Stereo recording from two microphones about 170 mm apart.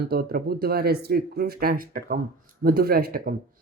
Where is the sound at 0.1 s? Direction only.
65° right (ahead or behind).